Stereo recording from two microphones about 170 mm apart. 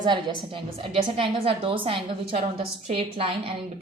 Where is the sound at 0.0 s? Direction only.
25° right (ahead or behind).